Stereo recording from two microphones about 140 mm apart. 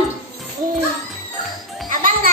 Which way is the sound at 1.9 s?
75° right (ahead or behind).